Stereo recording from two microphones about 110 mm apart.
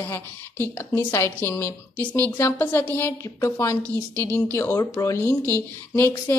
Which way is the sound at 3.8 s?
30° right (ahead or behind).